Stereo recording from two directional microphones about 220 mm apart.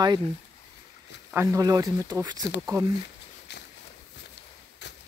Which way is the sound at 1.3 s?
10° right (ahead or behind).